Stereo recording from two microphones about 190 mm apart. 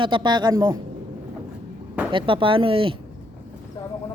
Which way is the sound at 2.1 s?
25° right (ahead or behind).